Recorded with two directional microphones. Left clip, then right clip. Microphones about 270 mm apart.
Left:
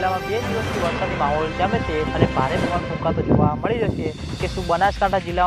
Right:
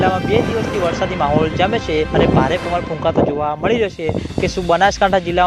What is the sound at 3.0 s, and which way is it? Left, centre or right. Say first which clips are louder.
Speech: right 4 dB; right.